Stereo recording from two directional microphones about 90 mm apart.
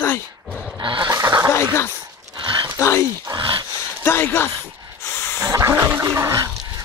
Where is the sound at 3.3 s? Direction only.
65° right (ahead or behind).